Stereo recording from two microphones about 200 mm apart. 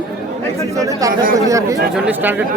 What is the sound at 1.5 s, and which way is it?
Speech, 15° right (ahead or behind).